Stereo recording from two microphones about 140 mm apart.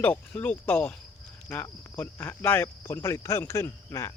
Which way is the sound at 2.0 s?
15° left (ahead or behind).